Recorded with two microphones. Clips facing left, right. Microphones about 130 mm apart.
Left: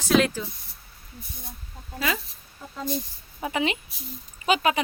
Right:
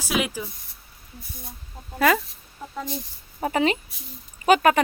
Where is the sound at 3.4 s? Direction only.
40° right (ahead or behind).